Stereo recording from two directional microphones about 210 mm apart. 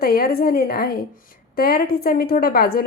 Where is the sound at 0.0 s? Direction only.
45° left (ahead or behind).